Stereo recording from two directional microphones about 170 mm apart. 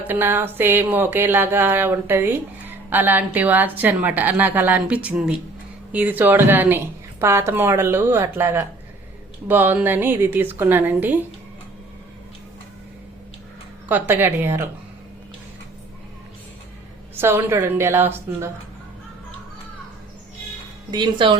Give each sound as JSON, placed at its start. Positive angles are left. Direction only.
{"t": 0.1, "sound": "speech", "side_deg": -15}
{"t": 13.8, "sound": "speech", "side_deg": -10}
{"t": 17.2, "sound": "speech", "side_deg": -15}
{"t": 20.9, "sound": "speech", "side_deg": -25}